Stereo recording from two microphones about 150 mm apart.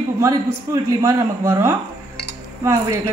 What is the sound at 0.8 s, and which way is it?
Speech, 20° right (ahead or behind).